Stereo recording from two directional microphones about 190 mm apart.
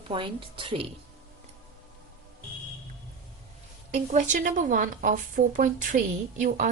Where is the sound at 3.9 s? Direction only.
40° right (ahead or behind).